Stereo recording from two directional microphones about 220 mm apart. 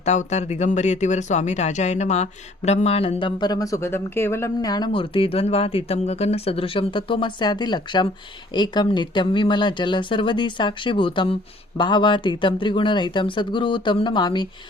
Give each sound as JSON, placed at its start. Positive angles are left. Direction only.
{"t": 0.0, "sound": "speech", "side_deg": 30}